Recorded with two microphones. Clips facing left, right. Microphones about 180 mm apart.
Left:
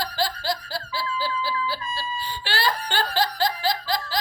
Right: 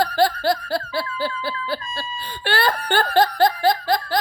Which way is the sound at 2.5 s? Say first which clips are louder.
Right 6 dB; 55° right (ahead or behind).